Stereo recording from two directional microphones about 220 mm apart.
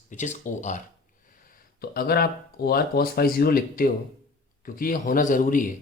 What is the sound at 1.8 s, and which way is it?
Speech, 45° left (ahead or behind).